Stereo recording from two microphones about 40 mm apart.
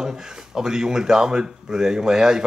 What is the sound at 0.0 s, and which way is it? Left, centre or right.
Speech, centre.